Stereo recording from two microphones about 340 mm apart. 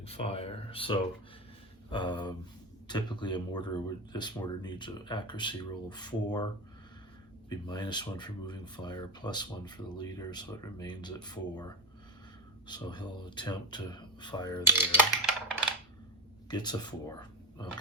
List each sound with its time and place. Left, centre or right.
0.0 s speech: centre
7.7 s speech: centre
14.8 s a sound: centre
16.5 s speech: centre